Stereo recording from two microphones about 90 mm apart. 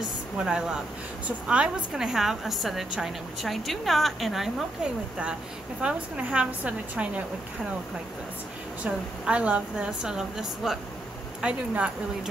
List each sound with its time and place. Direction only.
0.4 s a woman's voice: 10° right (ahead or behind)
5.8 s a woman's voice: 10° right (ahead or behind)
8.8 s a woman's voice: 10° right (ahead or behind)